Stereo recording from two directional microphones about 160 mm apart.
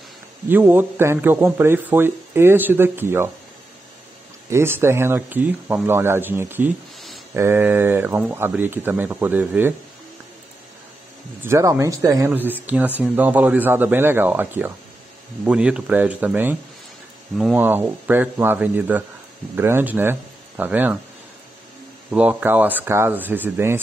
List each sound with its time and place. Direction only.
0.5 s a man's voice: 15° right (ahead or behind)
4.5 s a man's voice: 15° right (ahead or behind)
11.4 s a man's voice: 15° right (ahead or behind)
22.1 s a man's voice: 10° right (ahead or behind)